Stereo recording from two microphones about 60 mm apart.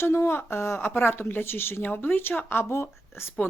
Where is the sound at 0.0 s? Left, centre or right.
Left.